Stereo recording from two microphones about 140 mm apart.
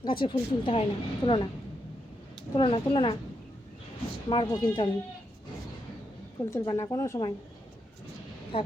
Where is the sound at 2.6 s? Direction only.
40° left (ahead or behind).